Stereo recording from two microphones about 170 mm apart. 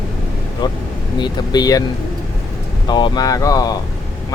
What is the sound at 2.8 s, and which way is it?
Speech, 25° left (ahead or behind).